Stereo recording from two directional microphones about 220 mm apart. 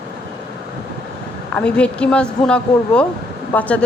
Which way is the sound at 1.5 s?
5° left (ahead or behind).